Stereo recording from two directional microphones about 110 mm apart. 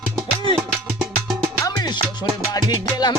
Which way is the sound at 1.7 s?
40° left (ahead or behind).